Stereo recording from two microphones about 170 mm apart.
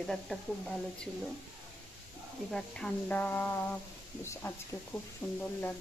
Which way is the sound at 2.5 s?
5° left (ahead or behind).